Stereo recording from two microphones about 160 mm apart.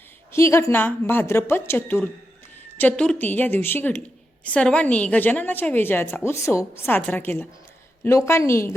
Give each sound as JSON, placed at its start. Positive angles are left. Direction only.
{"t": 0.3, "sound": "a woman's voice", "side_deg": 15}